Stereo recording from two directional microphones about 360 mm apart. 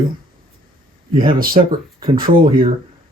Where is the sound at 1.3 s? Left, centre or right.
Right.